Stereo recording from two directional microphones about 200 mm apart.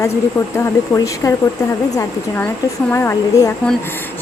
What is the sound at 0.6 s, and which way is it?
Speech, 15° left (ahead or behind).